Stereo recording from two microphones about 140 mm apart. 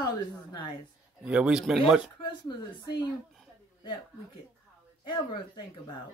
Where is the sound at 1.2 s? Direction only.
5° right (ahead or behind).